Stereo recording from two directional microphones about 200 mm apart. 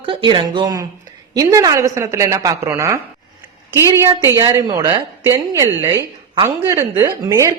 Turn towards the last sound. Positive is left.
turn(degrees=-15)  # may be behind; listen again after turning